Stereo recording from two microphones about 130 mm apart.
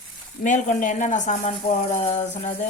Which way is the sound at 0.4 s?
80° left.